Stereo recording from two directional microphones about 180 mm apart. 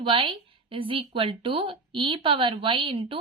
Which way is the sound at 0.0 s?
30° right (ahead or behind).